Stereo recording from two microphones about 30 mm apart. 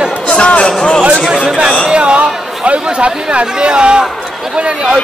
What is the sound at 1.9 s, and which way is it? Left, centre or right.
Chatter, right.